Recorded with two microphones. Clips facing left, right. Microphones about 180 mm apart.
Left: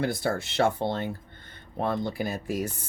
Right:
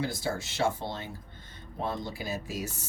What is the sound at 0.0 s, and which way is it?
Speech, 60° left (ahead or behind).